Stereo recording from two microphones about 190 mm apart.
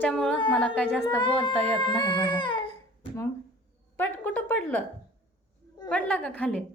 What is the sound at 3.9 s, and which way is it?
Speech, 10° left (ahead or behind).